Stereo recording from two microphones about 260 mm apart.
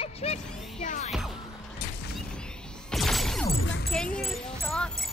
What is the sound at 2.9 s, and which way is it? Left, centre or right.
Music, centre.